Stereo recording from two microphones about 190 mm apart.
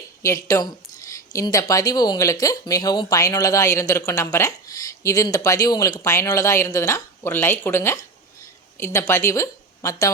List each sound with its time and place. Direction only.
0.2 s speech: 15° left (ahead or behind)